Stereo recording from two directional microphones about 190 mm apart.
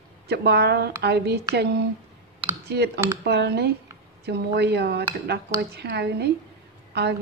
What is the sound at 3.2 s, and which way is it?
A woman's voice, 60° right (ahead or behind).